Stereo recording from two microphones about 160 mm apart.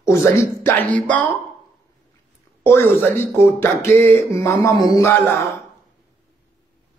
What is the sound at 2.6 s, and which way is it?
Speech, 15° left (ahead or behind).